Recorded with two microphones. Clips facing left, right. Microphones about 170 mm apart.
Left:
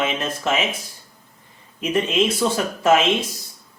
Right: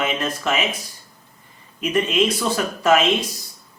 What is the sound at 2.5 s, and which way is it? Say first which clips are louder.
Speech: right 1 dB; 25° left (ahead or behind).